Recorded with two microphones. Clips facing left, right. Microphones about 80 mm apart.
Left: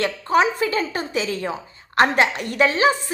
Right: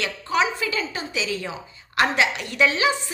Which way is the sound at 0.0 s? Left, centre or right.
Left.